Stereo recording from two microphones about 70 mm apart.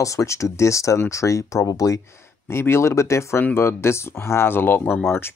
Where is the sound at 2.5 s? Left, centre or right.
Left.